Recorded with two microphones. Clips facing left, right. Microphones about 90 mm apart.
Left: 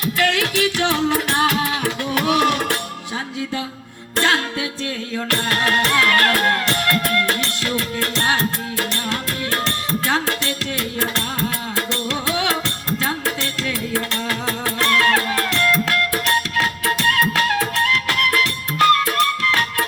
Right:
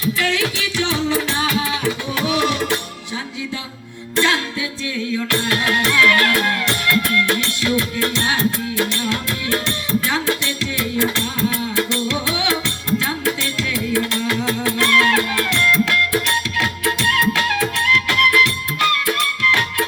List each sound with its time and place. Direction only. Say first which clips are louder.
0.0 s music: even; 55° left (ahead or behind)
4.1 s music: even; 45° left (ahead or behind)
10.1 s music: even; 40° left (ahead or behind)